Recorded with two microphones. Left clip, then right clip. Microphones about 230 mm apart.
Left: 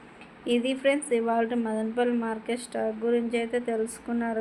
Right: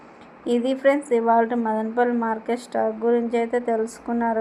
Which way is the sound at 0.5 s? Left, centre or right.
Right.